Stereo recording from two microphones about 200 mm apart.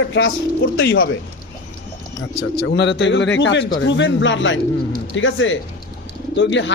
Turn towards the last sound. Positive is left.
turn(degrees=65)  # may be behind; listen again after turning